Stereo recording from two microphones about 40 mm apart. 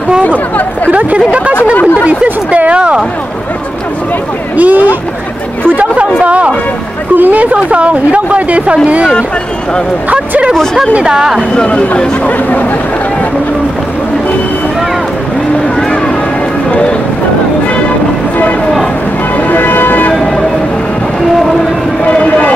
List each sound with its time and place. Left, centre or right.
0.9 s speech: right
2.5 s speech: right
4.6 s speech: right
6.2 s speech: right
7.2 s speech: right
7.5 s speech: right
10.5 s speech: centre
11.1 s speech: centre
11.5 s speech: left
12.3 s speech: left
19.4 s music: left